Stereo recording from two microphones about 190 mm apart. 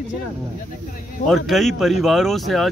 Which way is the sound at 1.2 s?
Centre (ahead or behind).